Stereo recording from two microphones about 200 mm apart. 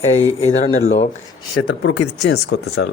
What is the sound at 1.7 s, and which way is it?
Speech, 80° left.